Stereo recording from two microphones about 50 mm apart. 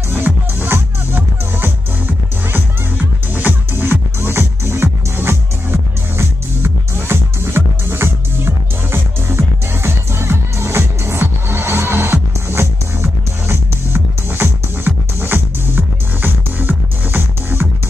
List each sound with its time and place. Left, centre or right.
0.1 s music: right